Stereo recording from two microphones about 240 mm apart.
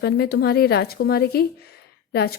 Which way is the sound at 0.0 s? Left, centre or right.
Left.